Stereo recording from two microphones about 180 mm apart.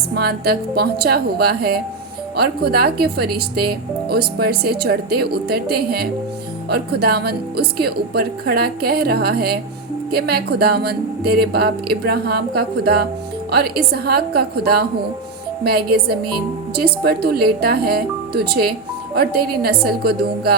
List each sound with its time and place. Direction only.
0.1 s speech: 60° right (ahead or behind)